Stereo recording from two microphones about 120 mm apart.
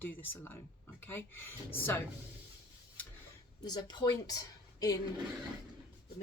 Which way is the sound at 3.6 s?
35° left (ahead or behind).